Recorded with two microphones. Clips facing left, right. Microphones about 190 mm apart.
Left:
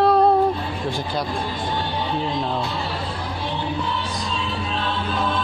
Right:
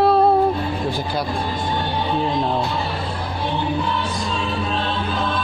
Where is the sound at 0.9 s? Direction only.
5° right (ahead or behind).